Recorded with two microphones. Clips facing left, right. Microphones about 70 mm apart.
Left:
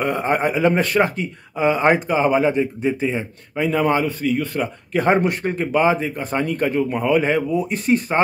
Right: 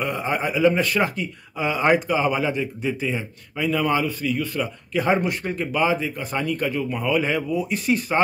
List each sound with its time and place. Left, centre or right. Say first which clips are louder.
0.0 s speech: left 5 dB; left